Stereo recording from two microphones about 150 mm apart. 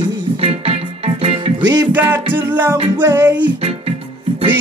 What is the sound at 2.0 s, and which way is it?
Music, 10° right (ahead or behind).